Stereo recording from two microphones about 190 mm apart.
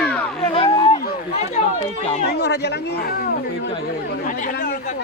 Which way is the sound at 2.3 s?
60° left (ahead or behind).